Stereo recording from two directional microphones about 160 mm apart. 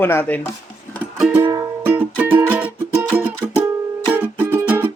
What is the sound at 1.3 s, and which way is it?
Music, 15° right (ahead or behind).